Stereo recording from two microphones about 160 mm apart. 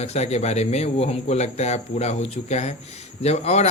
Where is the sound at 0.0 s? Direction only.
45° left (ahead or behind).